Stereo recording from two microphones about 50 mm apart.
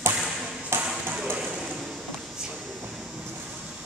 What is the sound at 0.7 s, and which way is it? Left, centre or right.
Ping, right.